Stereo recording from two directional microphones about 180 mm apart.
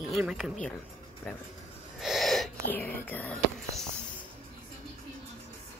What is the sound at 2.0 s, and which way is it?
Wheeze, centre (ahead or behind).